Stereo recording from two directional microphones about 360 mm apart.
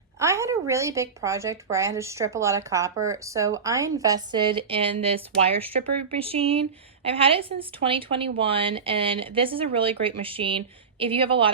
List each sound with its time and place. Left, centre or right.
0.2 s a woman's voice: centre
5.9 s speech: right
6.1 s a woman's voice: centre